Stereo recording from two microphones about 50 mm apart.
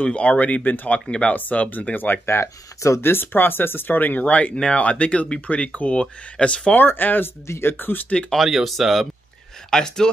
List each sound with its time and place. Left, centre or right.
0.0 s speech: left
2.2 s speech: left
3.0 s speech: left
6.8 s speech: left
8.4 s speech: centre
9.7 s speech: centre